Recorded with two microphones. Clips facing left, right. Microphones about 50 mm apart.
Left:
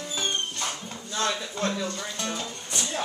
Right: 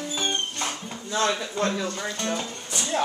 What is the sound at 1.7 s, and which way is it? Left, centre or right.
Speech, right.